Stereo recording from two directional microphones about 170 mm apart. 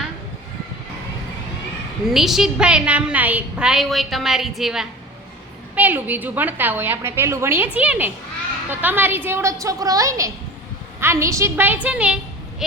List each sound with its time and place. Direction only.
2.0 s a woman's voice: centre (ahead or behind)